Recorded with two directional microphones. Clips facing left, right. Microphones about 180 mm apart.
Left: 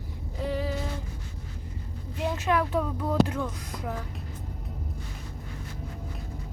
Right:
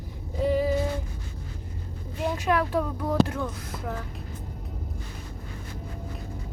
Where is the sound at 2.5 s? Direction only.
Centre (ahead or behind).